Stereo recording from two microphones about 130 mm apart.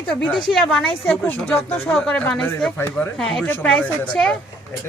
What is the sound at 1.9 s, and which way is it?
Speech, 5° left (ahead or behind).